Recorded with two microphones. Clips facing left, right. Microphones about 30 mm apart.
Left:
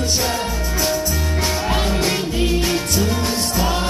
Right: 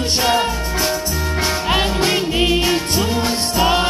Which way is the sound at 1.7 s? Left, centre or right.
Right.